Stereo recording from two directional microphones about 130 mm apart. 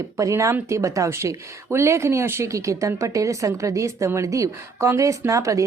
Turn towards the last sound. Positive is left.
turn(degrees=-25)  # may be behind; listen again after turning